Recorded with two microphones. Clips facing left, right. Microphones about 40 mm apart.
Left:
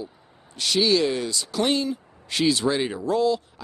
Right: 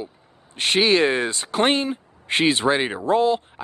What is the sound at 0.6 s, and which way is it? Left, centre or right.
A man's voice, right.